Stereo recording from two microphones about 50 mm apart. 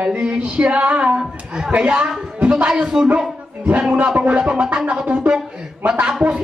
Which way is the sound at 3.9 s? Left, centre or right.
Right.